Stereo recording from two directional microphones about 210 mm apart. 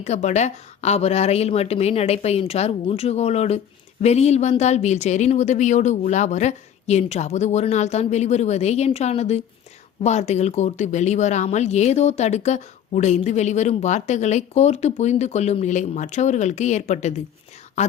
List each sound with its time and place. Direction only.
0.0 s speech: 35° left (ahead or behind)